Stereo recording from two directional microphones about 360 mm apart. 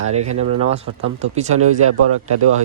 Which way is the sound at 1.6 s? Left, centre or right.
Right.